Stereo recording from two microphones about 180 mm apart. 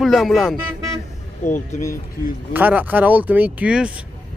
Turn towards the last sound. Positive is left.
turn(degrees=-5)  # may be behind; listen again after turning